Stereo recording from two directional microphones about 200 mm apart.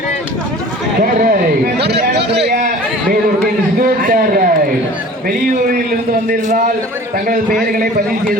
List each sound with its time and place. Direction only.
1.2 s a man's voice: 50° right (ahead or behind)
3.8 s a man's voice: 45° right (ahead or behind)